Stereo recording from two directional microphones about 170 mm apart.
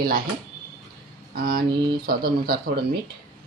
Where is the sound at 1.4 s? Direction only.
60° right (ahead or behind).